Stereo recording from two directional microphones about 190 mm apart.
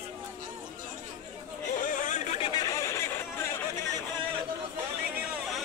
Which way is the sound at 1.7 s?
45° left (ahead or behind).